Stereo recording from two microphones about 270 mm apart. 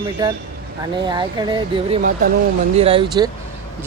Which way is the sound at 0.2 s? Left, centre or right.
Centre.